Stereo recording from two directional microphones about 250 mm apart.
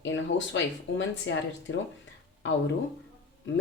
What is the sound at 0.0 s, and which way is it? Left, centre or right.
Speech, left.